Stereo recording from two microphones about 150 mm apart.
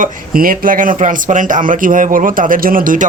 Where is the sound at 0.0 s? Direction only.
70° right (ahead or behind).